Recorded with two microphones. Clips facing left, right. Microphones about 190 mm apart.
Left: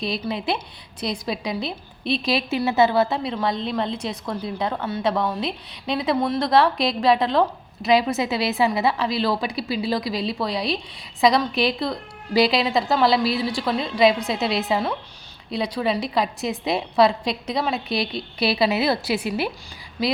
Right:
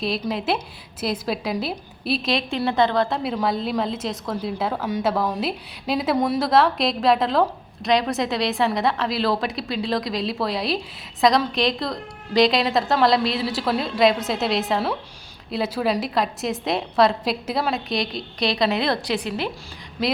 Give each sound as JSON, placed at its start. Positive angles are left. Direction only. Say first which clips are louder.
{"t": 0.0, "sound": "a woman's voice", "louder": "right 1 dB", "side_deg": 0}